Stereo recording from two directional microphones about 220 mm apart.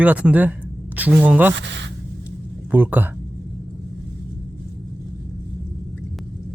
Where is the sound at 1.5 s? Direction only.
55° right (ahead or behind).